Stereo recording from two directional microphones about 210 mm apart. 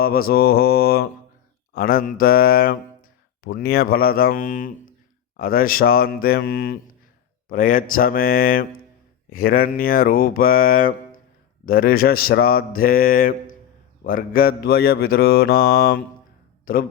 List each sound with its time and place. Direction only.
0.0 s a man's voice: 45° left (ahead or behind)